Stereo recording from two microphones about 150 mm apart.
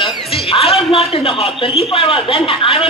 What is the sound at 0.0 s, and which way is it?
Speech, 40° left (ahead or behind).